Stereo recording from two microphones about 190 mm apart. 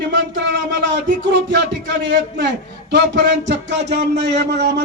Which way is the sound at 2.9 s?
65° right (ahead or behind).